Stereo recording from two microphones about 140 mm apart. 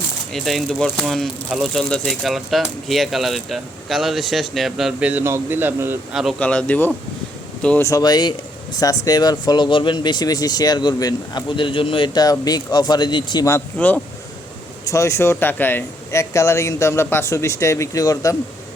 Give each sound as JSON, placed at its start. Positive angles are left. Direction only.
{"t": 0.3, "sound": "speech", "side_deg": 0}
{"t": 6.4, "sound": "speech", "side_deg": 10}
{"t": 7.8, "sound": "speech", "side_deg": 25}
{"t": 13.7, "sound": "speech", "side_deg": 10}
{"t": 14.8, "sound": "speech", "side_deg": 20}